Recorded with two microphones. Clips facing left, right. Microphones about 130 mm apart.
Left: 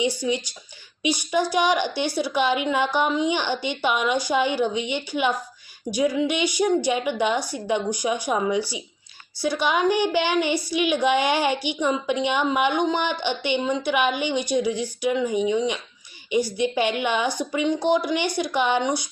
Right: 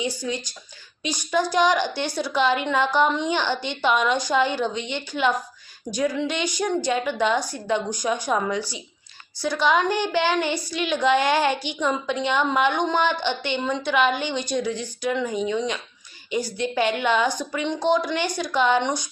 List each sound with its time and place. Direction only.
0.2 s a woman's voice: 10° left (ahead or behind)
1.5 s a woman's voice: 10° left (ahead or behind)